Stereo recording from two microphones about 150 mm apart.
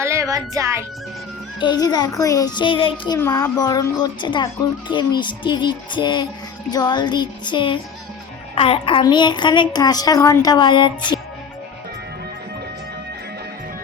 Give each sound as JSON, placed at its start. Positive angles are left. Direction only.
{"t": 0.0, "sound": "music", "side_deg": -20}
{"t": 1.5, "sound": "a child's voice", "side_deg": 30}
{"t": 3.2, "sound": "a child's voice", "side_deg": 15}